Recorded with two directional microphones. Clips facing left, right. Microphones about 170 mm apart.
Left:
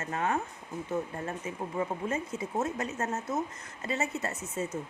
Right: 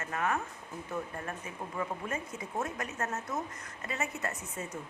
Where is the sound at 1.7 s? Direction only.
25° left (ahead or behind).